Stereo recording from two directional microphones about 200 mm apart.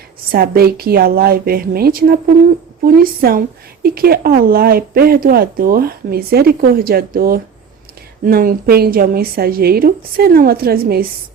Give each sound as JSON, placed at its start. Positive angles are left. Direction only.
{"t": 0.3, "sound": "a woman's voice", "side_deg": -50}